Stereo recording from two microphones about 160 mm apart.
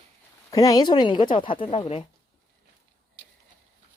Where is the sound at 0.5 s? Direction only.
20° left (ahead or behind).